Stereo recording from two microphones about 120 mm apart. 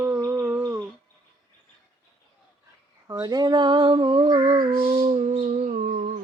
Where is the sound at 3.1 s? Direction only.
30° right (ahead or behind).